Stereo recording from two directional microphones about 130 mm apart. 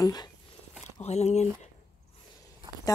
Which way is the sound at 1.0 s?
55° left (ahead or behind).